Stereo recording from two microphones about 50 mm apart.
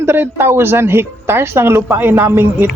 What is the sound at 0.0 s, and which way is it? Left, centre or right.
Speech, right.